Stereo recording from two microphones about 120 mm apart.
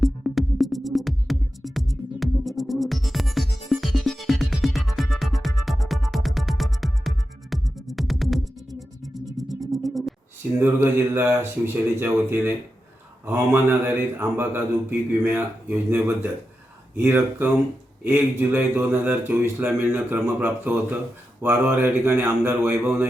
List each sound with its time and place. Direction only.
0.0 s music: centre (ahead or behind)
10.6 s speech: 20° right (ahead or behind)